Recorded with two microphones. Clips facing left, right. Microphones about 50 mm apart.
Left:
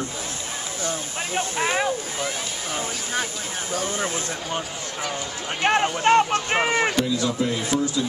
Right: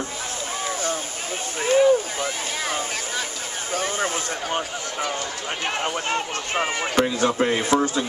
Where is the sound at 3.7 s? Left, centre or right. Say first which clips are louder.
Right 2 dB; right.